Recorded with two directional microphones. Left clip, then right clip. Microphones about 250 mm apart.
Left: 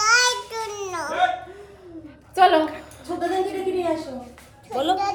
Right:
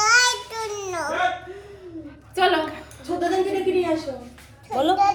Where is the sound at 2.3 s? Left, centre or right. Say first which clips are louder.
Left 4 dB; left.